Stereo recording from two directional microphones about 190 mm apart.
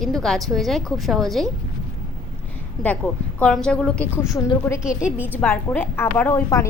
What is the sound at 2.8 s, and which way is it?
A woman's voice, 5° left (ahead or behind).